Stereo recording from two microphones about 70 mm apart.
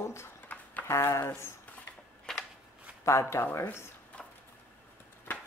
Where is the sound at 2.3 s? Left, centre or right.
Centre.